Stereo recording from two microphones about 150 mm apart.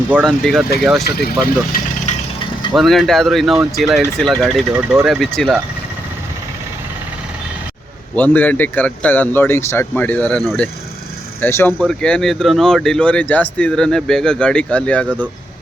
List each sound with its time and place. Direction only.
0.3 s speech: 5° left (ahead or behind)
1.0 s speech: 90° left
1.7 s speech: 75° left (ahead or behind)
2.7 s speech: centre (ahead or behind)
5.2 s speech: centre (ahead or behind)
8.1 s speech: 10° left (ahead or behind)